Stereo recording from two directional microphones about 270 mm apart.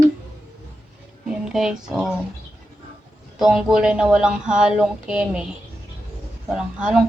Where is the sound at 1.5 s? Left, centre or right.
Centre.